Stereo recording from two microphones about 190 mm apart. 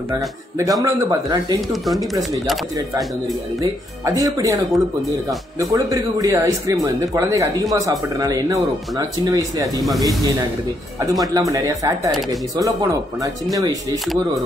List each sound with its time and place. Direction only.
0.1 s speech: 20° right (ahead or behind)
4.0 s speech: 20° right (ahead or behind)
5.6 s speech: 15° right (ahead or behind)